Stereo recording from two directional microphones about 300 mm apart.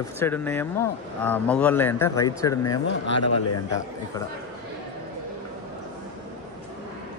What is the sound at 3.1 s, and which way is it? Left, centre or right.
Speech, left.